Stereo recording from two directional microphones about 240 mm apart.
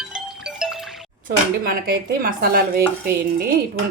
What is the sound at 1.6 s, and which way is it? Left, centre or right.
Speech, right.